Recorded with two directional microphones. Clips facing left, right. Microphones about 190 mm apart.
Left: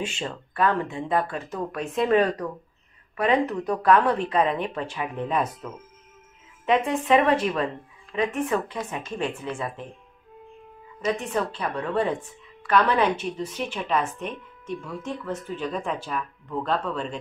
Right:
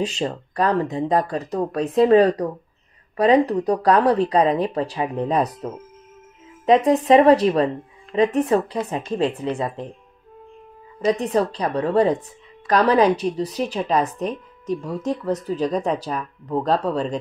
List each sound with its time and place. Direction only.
0.0 s a woman's voice: 40° right (ahead or behind)
11.0 s a woman's voice: 35° right (ahead or behind)